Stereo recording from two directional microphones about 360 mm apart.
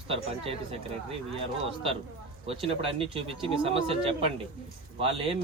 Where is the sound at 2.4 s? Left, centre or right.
Centre.